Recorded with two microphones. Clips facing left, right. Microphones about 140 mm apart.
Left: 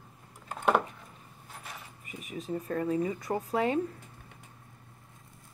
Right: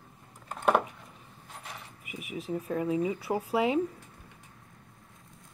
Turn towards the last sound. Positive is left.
turn(degrees=-10)  # may be behind; listen again after turning